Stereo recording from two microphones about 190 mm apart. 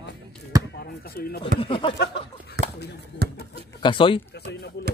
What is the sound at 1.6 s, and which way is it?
Speech, 25° left (ahead or behind).